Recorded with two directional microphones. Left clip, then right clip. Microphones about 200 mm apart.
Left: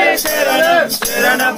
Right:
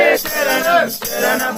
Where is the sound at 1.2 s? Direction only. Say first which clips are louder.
Left 3 dB; 20° right (ahead or behind).